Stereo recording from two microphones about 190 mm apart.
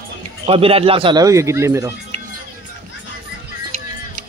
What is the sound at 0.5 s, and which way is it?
Speech, 30° right (ahead or behind).